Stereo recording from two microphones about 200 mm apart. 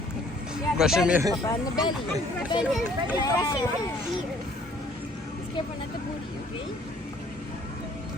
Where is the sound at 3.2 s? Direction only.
20° left (ahead or behind).